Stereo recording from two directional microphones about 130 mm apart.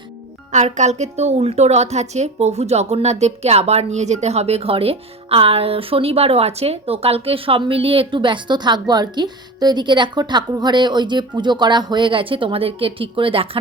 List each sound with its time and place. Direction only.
0.5 s a woman's voice: 65° right (ahead or behind); by 13.6 s 45° right (ahead or behind)